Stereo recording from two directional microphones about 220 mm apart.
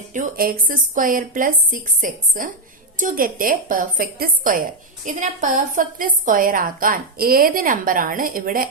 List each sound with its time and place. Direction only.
0.1 s a woman's voice: 40° right (ahead or behind)